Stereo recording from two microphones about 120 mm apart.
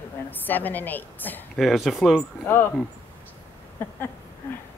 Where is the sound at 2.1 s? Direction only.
15° left (ahead or behind).